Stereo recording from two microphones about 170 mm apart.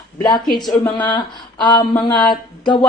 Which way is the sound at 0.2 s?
25° left (ahead or behind).